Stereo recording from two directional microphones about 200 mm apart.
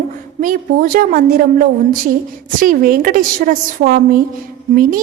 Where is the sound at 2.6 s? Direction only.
45° right (ahead or behind).